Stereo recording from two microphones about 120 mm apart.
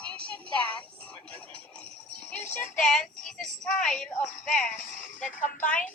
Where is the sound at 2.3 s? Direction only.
15° left (ahead or behind).